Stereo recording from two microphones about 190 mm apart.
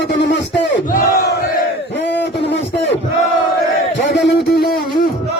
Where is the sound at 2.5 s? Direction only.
65° left (ahead or behind).